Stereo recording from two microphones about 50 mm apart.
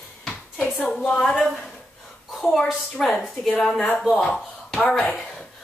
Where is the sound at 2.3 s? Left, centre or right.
Centre.